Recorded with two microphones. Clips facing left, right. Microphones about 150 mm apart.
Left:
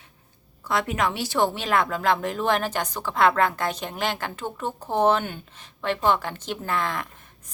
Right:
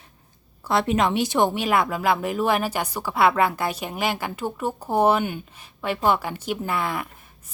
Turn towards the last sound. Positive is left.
turn(degrees=-10)  # may be behind; listen again after turning